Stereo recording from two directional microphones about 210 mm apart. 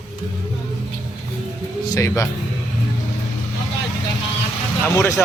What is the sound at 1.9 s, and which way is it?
Speech, 15° left (ahead or behind).